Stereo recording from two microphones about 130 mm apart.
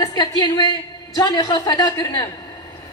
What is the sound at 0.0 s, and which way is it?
A woman's voice, 30° left (ahead or behind).